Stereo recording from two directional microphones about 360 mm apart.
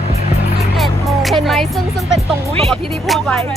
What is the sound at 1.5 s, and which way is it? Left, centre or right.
Speech, centre.